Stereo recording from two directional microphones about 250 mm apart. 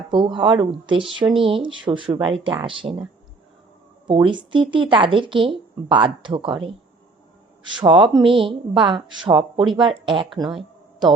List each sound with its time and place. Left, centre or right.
0.1 s speech: centre
4.0 s speech: centre
7.8 s speech: centre